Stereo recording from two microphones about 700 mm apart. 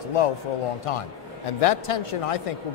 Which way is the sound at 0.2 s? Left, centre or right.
Left.